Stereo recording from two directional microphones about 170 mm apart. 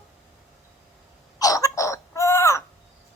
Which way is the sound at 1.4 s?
20° left (ahead or behind).